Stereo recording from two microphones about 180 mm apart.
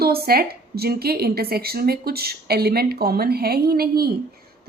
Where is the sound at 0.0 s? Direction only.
60° right (ahead or behind).